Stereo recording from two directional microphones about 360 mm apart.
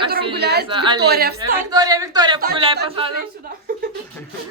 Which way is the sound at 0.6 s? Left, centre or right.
Centre.